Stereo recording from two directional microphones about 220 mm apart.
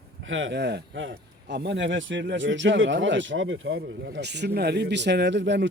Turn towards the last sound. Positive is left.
turn(degrees=-55)  # may be behind; listen again after turning